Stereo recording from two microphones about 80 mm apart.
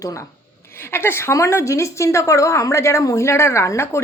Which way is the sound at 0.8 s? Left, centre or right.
Left.